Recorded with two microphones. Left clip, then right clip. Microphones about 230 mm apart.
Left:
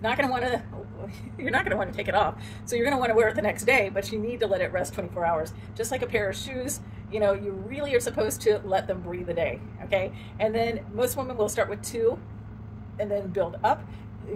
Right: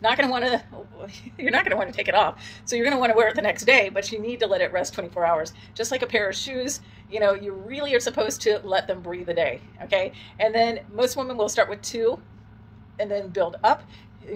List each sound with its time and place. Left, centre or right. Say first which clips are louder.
0.0 s speech: right 4 dB; centre
12.9 s speech: right 2 dB; left